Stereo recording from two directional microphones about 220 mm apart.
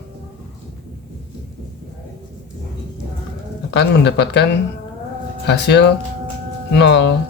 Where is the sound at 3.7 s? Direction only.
50° left (ahead or behind).